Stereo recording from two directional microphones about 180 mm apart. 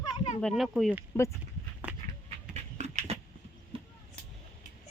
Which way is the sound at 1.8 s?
10° right (ahead or behind).